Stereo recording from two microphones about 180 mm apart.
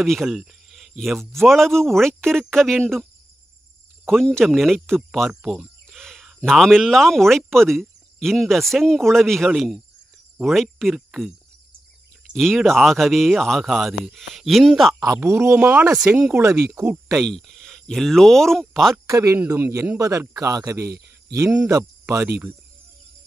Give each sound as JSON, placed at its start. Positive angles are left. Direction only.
{"t": 0.0, "sound": "speech", "side_deg": 0}
{"t": 4.1, "sound": "speech", "side_deg": 0}
{"t": 15.0, "sound": "a man's voice", "side_deg": -15}
{"t": 17.2, "sound": "speech", "side_deg": 0}
{"t": 19.0, "sound": "a man's voice", "side_deg": -20}